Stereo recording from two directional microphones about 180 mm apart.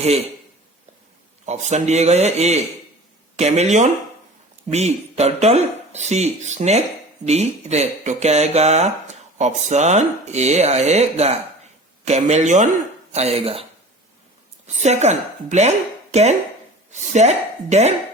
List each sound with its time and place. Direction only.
1.5 s speech: 40° right (ahead or behind)
14.8 s speech: 40° right (ahead or behind)